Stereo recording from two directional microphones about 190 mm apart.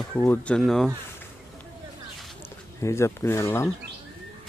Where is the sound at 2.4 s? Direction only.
15° left (ahead or behind).